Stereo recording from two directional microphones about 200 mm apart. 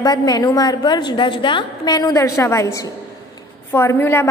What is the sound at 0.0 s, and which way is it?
A woman's voice, 20° left (ahead or behind).